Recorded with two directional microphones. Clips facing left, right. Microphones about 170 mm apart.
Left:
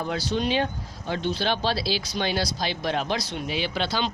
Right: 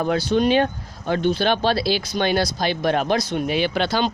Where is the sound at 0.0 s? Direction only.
55° right (ahead or behind).